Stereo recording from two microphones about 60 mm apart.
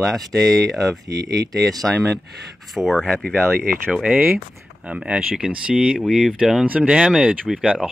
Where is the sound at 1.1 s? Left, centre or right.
Right.